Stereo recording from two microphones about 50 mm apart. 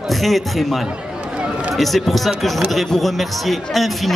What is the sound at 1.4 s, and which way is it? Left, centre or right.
Run, right.